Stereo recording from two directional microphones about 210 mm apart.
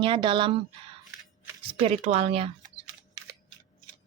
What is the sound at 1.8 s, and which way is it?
Speech, 30° right (ahead or behind).